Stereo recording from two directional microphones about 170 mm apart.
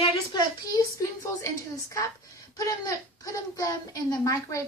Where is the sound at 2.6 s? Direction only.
20° left (ahead or behind).